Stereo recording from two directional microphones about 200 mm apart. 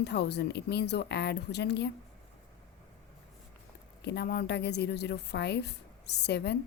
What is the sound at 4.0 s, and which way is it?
Speech, 55° left (ahead or behind).